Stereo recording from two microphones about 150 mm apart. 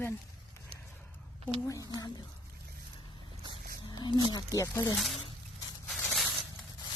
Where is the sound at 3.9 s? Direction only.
30° left (ahead or behind).